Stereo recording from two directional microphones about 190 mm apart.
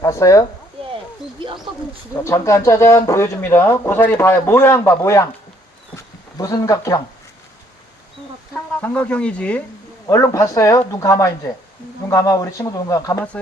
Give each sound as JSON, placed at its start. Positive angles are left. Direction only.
{"t": 0.0, "sound": "speech", "side_deg": 15}
{"t": 1.4, "sound": "speech", "side_deg": -25}
{"t": 2.1, "sound": "speech", "side_deg": 15}
{"t": 8.5, "sound": "speech", "side_deg": 5}
{"t": 10.1, "sound": "speech", "side_deg": 15}